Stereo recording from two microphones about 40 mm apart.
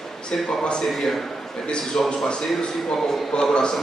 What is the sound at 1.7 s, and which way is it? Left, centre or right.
Speech, left.